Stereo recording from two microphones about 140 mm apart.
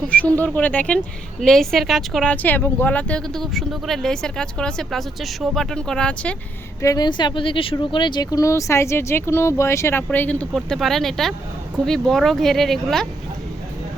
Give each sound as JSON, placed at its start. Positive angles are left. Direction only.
{"t": 0.1, "sound": "a woman's voice", "side_deg": 10}
{"t": 6.8, "sound": "a woman's voice", "side_deg": 30}